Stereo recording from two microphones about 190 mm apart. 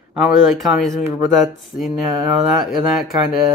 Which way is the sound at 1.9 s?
Centre (ahead or behind).